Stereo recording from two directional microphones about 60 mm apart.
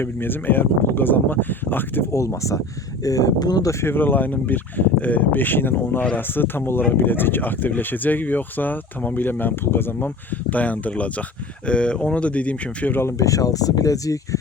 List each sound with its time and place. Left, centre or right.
0.0 s speech: left
2.1 s speech: left
3.0 s speech: left
3.8 s speech: left
10.5 s speech: left
12.9 s speech: left
13.1 s speech: left